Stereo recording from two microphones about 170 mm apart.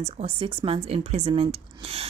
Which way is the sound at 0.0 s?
35° right (ahead or behind).